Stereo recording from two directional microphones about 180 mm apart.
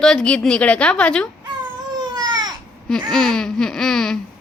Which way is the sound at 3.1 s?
5° left (ahead or behind).